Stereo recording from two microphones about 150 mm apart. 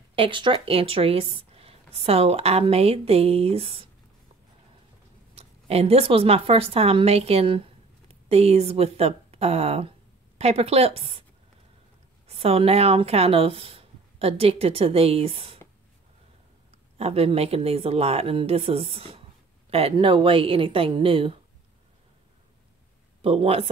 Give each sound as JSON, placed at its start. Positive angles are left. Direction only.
{"t": 0.1, "sound": "speech", "side_deg": -35}
{"t": 5.3, "sound": "speech", "side_deg": -45}
{"t": 12.3, "sound": "speech", "side_deg": -40}
{"t": 17.0, "sound": "speech", "side_deg": -40}
{"t": 23.2, "sound": "speech", "side_deg": -40}